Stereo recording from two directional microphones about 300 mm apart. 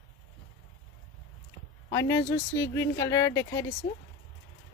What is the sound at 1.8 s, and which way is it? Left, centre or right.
Speech, centre.